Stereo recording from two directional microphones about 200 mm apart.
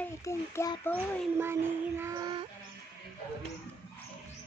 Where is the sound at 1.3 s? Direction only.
10° right (ahead or behind).